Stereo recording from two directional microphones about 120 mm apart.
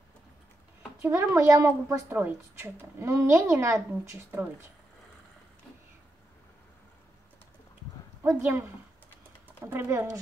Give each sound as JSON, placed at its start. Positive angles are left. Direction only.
{"t": 1.0, "sound": "a woman's voice", "side_deg": -20}
{"t": 8.2, "sound": "a woman's voice", "side_deg": -20}